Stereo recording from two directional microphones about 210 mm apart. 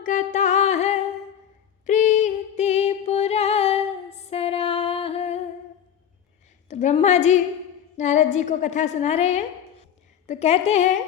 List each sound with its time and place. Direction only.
0.0 s music: 35° left (ahead or behind)
6.7 s a sound: 35° left (ahead or behind)
7.9 s a woman's voice: 35° left (ahead or behind)